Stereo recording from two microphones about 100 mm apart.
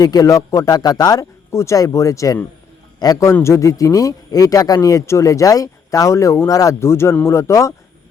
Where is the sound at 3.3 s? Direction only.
30° left (ahead or behind).